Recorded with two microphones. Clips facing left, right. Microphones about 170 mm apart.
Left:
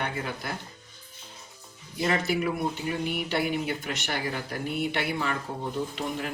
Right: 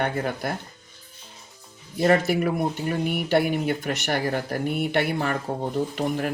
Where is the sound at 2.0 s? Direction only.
50° right (ahead or behind).